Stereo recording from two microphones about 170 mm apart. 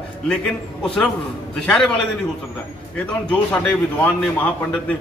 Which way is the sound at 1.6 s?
5° left (ahead or behind).